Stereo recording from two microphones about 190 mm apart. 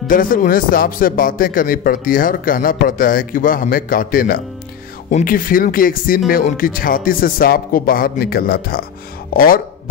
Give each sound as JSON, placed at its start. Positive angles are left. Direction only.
{"t": 0.1, "sound": "a man's voice", "side_deg": 45}